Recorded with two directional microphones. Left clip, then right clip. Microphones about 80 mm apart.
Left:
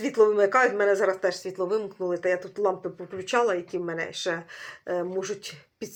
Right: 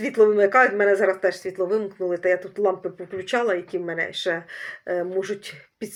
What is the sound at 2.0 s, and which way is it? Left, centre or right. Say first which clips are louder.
Speech: right 5 dB; centre.